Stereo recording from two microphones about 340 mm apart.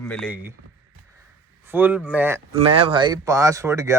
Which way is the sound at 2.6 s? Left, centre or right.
Centre.